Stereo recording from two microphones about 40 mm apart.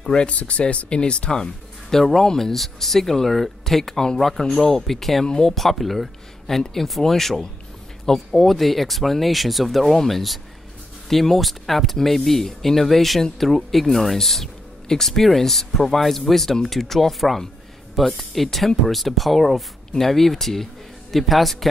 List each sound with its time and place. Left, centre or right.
0.1 s speech: left
2.0 s speech: centre
5.2 s speech: centre